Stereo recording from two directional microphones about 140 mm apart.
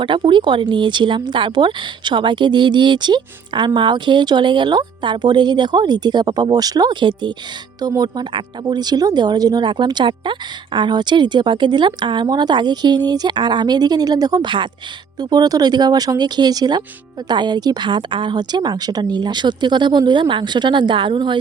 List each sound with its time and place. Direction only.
0.0 s a woman's voice: 35° right (ahead or behind)